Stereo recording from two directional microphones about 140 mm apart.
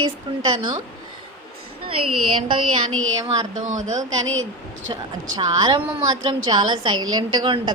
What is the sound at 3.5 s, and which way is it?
Speech, 60° right (ahead or behind).